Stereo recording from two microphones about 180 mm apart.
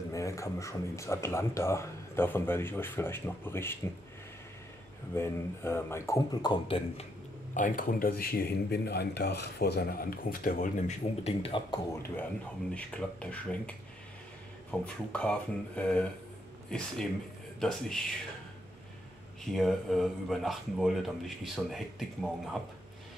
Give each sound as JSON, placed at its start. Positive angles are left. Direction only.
{"t": 0.1, "sound": "speech", "side_deg": 15}
{"t": 5.1, "sound": "speech", "side_deg": 15}
{"t": 7.5, "sound": "speech", "side_deg": 45}
{"t": 12.7, "sound": "speech", "side_deg": 5}
{"t": 19.4, "sound": "speech", "side_deg": 0}